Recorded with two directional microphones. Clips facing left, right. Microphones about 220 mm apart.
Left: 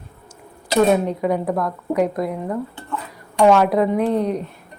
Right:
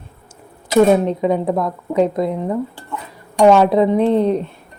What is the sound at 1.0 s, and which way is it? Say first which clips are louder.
A woman's voice: right 3 dB; 25° right (ahead or behind).